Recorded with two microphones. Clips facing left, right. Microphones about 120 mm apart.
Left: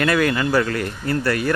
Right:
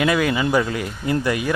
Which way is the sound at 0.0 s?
10° right (ahead or behind).